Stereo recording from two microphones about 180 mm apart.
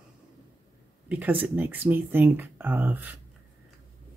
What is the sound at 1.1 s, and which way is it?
Speech, 10° right (ahead or behind).